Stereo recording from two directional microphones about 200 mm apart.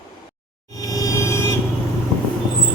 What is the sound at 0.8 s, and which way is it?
Music, 20° left (ahead or behind).